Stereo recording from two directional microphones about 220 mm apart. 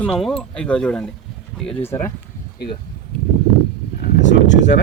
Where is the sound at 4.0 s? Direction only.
40° left (ahead or behind).